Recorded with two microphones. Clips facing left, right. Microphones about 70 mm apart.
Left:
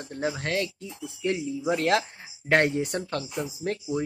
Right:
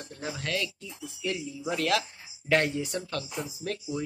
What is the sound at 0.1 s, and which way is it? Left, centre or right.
Speech, left.